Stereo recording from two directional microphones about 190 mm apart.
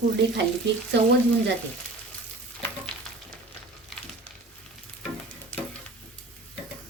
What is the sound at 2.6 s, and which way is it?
Frying, 5° left (ahead or behind).